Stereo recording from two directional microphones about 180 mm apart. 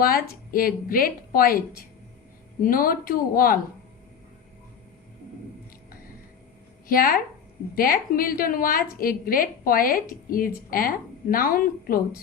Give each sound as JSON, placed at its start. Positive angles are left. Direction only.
{"t": 0.0, "sound": "a woman's voice", "side_deg": 55}
{"t": 2.6, "sound": "a woman's voice", "side_deg": 50}
{"t": 6.8, "sound": "a woman's voice", "side_deg": 50}